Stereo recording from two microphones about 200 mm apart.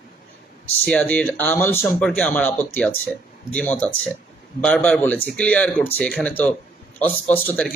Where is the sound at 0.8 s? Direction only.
5° left (ahead or behind).